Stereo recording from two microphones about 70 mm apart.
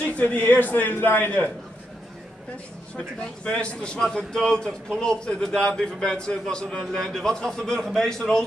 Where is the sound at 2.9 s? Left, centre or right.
Centre.